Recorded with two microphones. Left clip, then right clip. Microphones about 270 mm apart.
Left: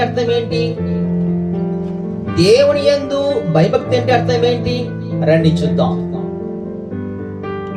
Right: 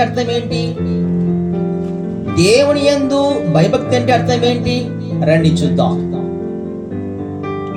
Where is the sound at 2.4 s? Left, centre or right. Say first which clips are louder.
Even; right.